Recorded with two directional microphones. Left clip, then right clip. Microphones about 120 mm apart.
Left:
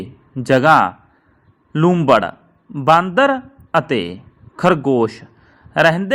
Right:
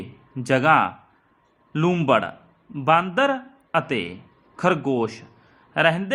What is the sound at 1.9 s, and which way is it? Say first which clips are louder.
Speech: left 7 dB; 15° left (ahead or behind).